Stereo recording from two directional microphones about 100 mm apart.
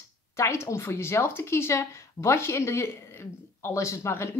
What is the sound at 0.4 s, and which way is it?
Speech, 30° left (ahead or behind).